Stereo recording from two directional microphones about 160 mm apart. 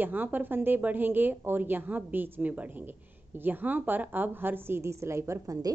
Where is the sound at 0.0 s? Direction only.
10° right (ahead or behind).